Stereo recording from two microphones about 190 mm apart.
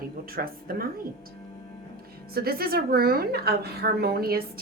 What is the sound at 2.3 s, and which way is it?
A woman's voice, 55° right (ahead or behind).